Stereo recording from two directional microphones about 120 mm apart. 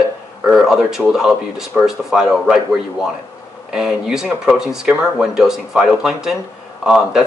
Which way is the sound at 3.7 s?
5° right (ahead or behind).